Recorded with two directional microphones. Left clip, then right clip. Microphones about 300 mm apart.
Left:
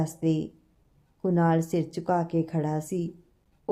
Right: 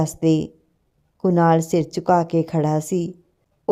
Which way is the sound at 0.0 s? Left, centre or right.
Right.